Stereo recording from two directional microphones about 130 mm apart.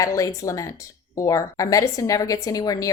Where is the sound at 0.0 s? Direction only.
25° left (ahead or behind).